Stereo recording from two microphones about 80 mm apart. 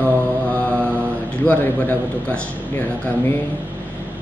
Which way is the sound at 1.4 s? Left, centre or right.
Left.